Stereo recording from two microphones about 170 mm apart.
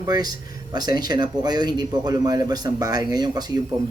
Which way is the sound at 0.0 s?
25° right (ahead or behind).